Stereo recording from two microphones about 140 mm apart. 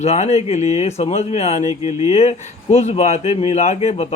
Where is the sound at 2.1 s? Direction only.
55° left (ahead or behind).